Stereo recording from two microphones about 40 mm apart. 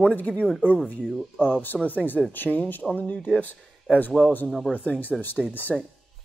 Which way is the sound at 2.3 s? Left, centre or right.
Left.